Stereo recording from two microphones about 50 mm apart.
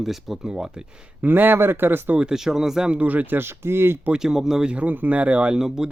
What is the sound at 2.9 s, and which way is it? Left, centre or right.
Speech, right.